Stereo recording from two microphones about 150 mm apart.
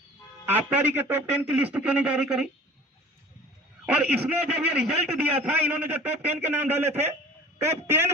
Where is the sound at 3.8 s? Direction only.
10° right (ahead or behind).